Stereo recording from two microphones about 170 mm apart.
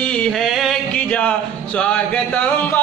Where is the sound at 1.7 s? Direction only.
5° left (ahead or behind).